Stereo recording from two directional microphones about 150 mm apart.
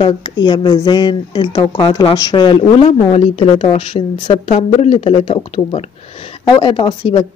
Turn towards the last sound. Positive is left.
turn(degrees=30)  # may be behind; listen again after turning